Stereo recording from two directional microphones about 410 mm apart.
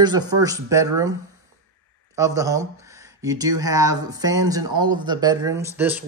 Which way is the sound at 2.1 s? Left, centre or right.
Centre.